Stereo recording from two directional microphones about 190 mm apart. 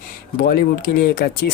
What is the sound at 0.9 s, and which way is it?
Speech, 50° left (ahead or behind).